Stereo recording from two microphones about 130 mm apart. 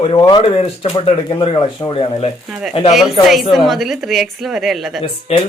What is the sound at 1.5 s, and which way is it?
Speech, 35° left (ahead or behind).